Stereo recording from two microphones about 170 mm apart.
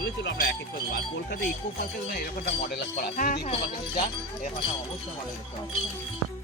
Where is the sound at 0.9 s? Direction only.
65° left (ahead or behind).